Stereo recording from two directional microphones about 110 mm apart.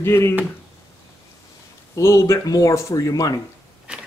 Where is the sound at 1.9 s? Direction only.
25° left (ahead or behind).